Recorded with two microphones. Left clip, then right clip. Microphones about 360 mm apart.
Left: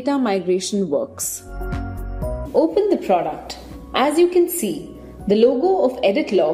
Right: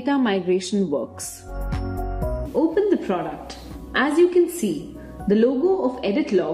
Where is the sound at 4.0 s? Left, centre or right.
Centre.